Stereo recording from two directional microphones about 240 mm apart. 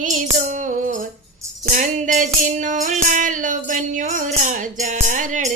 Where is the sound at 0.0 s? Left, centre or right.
Right.